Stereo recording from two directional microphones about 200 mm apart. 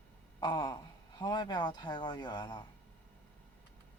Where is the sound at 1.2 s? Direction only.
20° left (ahead or behind).